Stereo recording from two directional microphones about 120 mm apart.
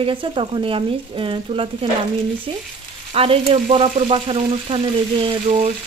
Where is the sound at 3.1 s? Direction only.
55° right (ahead or behind).